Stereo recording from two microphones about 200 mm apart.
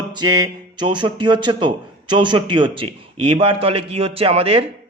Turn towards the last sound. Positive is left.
turn(degrees=-30)  # may be behind; listen again after turning